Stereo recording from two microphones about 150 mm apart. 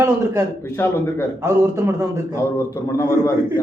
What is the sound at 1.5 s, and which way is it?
Speech, 20° right (ahead or behind).